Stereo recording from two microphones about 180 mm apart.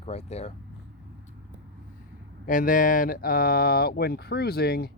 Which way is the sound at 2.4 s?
50° left (ahead or behind).